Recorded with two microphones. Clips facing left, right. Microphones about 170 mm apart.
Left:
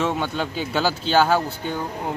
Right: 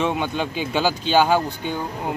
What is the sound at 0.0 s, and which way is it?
Speech, 10° right (ahead or behind).